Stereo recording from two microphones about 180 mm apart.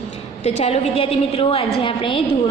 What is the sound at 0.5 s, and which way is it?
A woman's voice, 35° left (ahead or behind).